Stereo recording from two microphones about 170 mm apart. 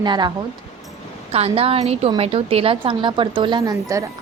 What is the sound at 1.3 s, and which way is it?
A woman's voice, 35° right (ahead or behind).